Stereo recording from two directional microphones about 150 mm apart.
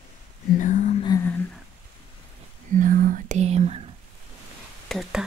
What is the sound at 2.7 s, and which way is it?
Whispering, 60° right (ahead or behind).